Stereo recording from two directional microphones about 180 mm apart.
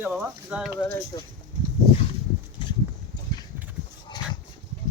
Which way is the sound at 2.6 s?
25° left (ahead or behind).